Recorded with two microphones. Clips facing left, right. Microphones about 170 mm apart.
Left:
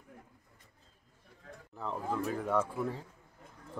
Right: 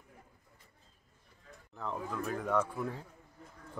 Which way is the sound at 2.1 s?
10° left (ahead or behind).